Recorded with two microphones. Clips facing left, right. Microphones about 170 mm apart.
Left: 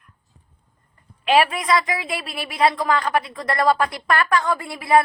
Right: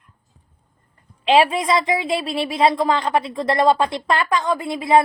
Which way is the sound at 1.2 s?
25° right (ahead or behind).